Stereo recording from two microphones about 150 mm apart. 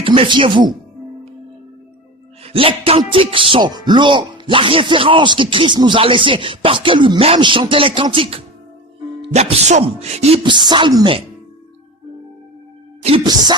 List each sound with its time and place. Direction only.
0.0 s speech: 35° right (ahead or behind)
2.4 s speech: 40° right (ahead or behind)
10.4 s speech: 30° right (ahead or behind)
13.0 s music: 40° right (ahead or behind)
13.2 s music: 25° right (ahead or behind)